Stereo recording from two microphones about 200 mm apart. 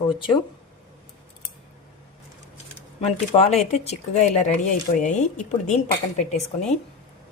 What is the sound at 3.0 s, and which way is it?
A woman's voice, 30° left (ahead or behind).